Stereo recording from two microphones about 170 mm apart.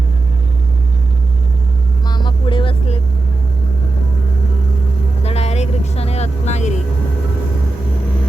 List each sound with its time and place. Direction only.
2.0 s vehicle: 25° left (ahead or behind)
5.2 s vehicle: 40° left (ahead or behind)